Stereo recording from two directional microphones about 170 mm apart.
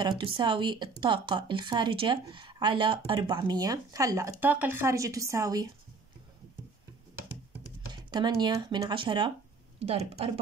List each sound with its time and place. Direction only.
0.0 s speech: 30° right (ahead or behind)
7.9 s speech: 25° right (ahead or behind)